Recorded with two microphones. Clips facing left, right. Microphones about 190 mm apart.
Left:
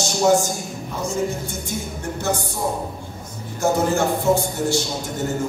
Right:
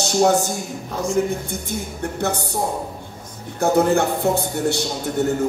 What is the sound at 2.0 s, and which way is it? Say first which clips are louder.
Speech: right 1 dB; 60° right (ahead or behind).